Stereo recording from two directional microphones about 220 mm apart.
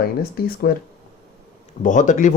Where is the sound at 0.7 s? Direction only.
40° left (ahead or behind).